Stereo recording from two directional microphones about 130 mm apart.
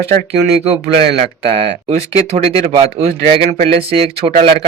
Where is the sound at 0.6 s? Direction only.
45° right (ahead or behind).